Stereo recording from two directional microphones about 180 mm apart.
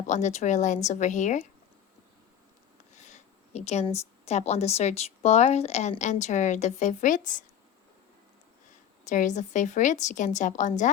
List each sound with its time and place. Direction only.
0.1 s speech: 40° left (ahead or behind)
2.9 s a woman's voice: 40° left (ahead or behind)
9.0 s a woman's voice: 45° left (ahead or behind)